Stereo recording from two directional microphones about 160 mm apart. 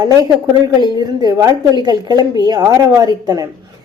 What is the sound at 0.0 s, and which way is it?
A woman's voice, 25° right (ahead or behind).